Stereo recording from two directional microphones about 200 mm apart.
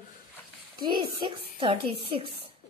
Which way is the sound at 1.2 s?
25° right (ahead or behind).